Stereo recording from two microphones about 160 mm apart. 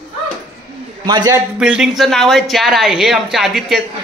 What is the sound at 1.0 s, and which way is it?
Speech, 25° right (ahead or behind).